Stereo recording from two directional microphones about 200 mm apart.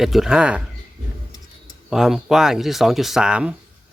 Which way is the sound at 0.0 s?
Centre (ahead or behind).